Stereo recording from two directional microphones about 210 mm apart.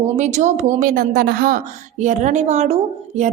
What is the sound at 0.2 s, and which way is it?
A woman's voice, 35° right (ahead or behind).